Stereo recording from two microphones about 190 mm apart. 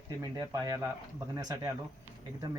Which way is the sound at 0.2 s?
20° right (ahead or behind).